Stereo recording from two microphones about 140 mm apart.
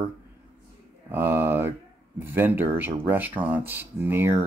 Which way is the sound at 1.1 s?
15° right (ahead or behind).